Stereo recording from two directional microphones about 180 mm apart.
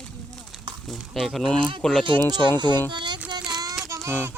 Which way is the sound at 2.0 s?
25° right (ahead or behind).